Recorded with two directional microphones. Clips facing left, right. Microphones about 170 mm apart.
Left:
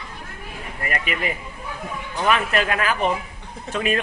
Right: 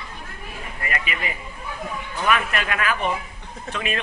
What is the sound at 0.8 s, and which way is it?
A man's voice, 40° left (ahead or behind).